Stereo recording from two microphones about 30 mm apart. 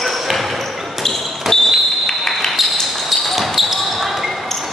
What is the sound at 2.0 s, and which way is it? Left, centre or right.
Basketball bounce, centre.